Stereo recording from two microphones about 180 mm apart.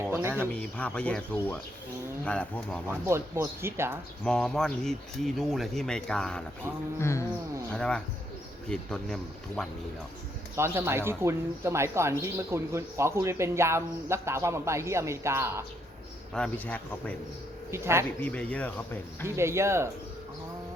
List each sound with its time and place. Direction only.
0.1 s speech: 15° right (ahead or behind)
0.4 s speech: 5° left (ahead or behind)
2.8 s speech: 15° right (ahead or behind)
4.2 s speech: 5° left (ahead or behind)
7.0 s speech: 15° left (ahead or behind)
7.7 s speech: 5° left (ahead or behind)
10.6 s speech: 15° right (ahead or behind)
16.3 s speech: 5° left (ahead or behind)
17.7 s speech: 15° right (ahead or behind)
18.2 s speech: 5° left (ahead or behind)
19.4 s speech: 15° right (ahead or behind)